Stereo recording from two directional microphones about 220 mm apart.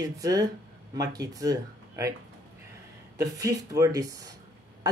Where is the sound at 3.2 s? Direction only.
15° right (ahead or behind).